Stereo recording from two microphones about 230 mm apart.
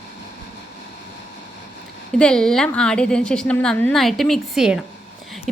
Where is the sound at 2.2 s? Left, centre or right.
Centre.